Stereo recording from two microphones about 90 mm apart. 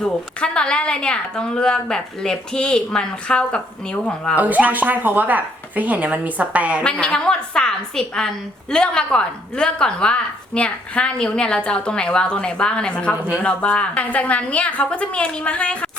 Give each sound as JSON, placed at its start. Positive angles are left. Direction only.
{"t": 0.0, "sound": "a woman's voice", "side_deg": 10}
{"t": 4.4, "sound": "a woman's voice", "side_deg": -15}
{"t": 6.8, "sound": "a woman's voice", "side_deg": 10}